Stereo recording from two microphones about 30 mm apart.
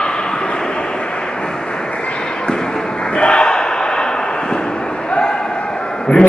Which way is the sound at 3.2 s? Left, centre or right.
Left.